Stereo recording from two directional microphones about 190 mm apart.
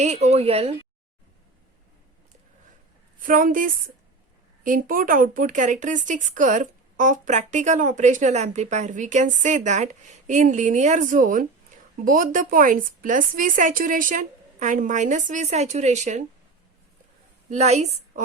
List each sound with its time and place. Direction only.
0.0 s a woman's voice: 35° right (ahead or behind)
3.2 s a woman's voice: 45° right (ahead or behind)
17.5 s a woman's voice: 35° right (ahead or behind)